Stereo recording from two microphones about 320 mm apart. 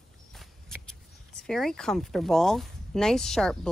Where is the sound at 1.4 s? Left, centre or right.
Centre.